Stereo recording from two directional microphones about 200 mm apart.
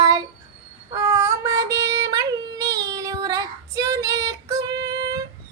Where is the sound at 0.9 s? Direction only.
15° right (ahead or behind).